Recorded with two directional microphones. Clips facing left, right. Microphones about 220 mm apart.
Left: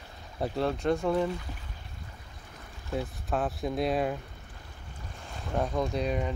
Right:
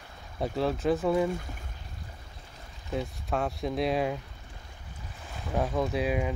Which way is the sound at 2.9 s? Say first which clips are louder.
Even; centre (ahead or behind).